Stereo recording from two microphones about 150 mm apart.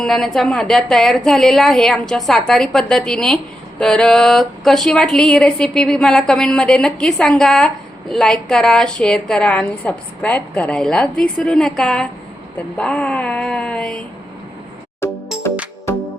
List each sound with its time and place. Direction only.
0.0 s speech: 5° left (ahead or behind)
15.0 s music: 15° left (ahead or behind)